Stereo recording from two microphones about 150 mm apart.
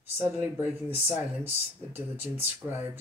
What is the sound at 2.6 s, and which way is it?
Speech, 15° right (ahead or behind).